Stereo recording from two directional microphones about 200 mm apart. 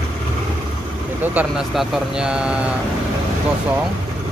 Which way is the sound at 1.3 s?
5° right (ahead or behind).